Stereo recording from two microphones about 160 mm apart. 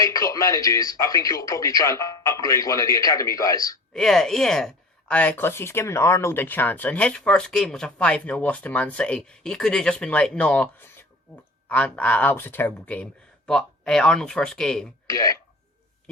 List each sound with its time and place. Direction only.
0.0 s speech: 20° left (ahead or behind)
3.9 s speech: 5° left (ahead or behind)
15.1 s speech: 20° left (ahead or behind)